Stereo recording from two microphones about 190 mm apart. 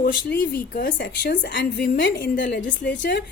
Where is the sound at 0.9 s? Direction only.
70° left (ahead or behind).